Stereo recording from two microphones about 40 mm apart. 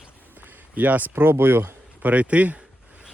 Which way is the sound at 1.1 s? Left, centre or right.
Right.